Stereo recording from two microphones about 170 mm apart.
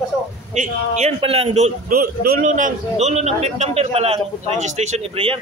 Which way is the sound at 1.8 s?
60° right (ahead or behind).